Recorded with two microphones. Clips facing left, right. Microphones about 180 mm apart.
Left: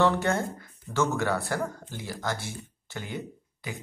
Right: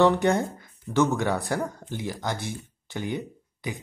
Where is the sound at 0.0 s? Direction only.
15° right (ahead or behind).